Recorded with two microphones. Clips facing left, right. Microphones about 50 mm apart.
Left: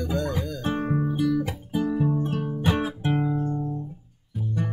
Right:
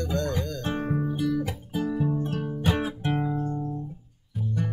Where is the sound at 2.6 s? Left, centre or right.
Centre.